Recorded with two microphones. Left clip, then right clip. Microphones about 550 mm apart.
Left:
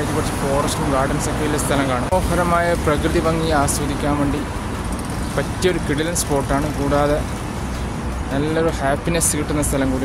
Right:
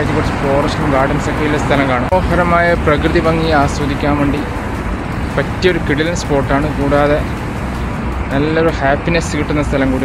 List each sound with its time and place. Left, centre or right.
1.7 s speech: left
5.6 s speech: left
8.4 s speech: left